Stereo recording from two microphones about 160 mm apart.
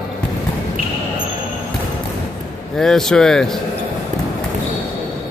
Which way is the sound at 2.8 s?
5° left (ahead or behind).